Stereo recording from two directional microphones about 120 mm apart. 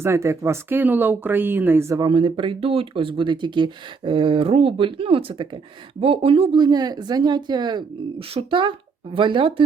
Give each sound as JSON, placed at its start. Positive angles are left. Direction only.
{"t": 0.0, "sound": "speech", "side_deg": -25}
{"t": 2.0, "sound": "speech", "side_deg": -45}